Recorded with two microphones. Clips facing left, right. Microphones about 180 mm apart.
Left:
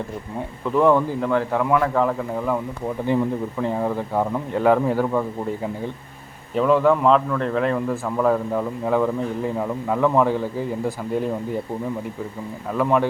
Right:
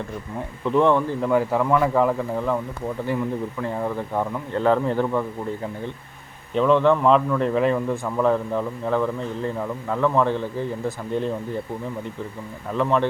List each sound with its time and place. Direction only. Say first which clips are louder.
0.6 s a man's voice: left 1 dB; 5° left (ahead or behind)
1.3 s a man's voice: right 1 dB; 5° right (ahead or behind)
3.1 s a man's voice: left 5 dB; 20° left (ahead or behind)
6.5 s a man's voice: even; 5° left (ahead or behind)
12.7 s a man's voice: left 1 dB; 10° left (ahead or behind)